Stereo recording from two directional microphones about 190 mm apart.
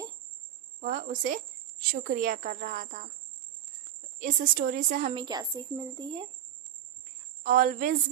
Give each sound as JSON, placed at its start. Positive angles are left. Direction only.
{"t": 0.8, "sound": "a woman's voice", "side_deg": -45}
{"t": 4.2, "sound": "a woman's voice", "side_deg": -50}
{"t": 5.1, "sound": "a woman's voice", "side_deg": -20}
{"t": 7.4, "sound": "a woman's voice", "side_deg": -45}